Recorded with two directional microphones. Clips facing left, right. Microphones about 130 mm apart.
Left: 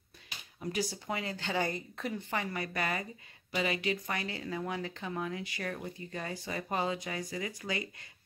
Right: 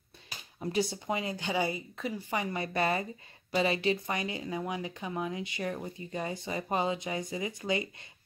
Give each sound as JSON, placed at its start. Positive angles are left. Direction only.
{"t": 0.3, "sound": "speech", "side_deg": -30}
{"t": 2.0, "sound": "speech", "side_deg": 0}
{"t": 2.3, "sound": "speech", "side_deg": -20}
{"t": 4.2, "sound": "speech", "side_deg": -15}